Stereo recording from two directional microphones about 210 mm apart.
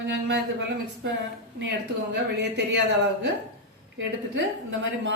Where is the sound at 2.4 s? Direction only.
55° right (ahead or behind).